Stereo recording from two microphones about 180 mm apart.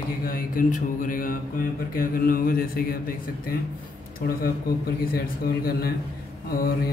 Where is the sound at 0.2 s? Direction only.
50° left (ahead or behind).